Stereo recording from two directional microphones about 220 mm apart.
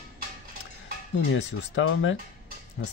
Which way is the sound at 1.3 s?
60° left (ahead or behind).